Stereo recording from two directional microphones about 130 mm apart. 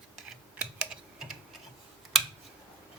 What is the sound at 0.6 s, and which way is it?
Typing, 5° right (ahead or behind).